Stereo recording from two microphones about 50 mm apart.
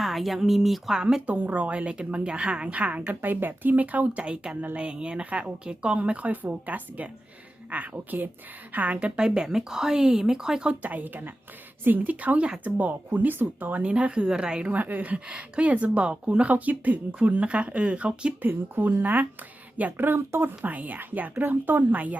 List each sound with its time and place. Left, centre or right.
0.0 s speech: centre
1.3 s a woman's voice: right
9.1 s speech: centre
10.8 s a woman's voice: right
13.8 s speech: right
14.7 s speech: right
18.4 s a woman's voice: right
20.0 s speech: right
20.7 s a woman's voice: right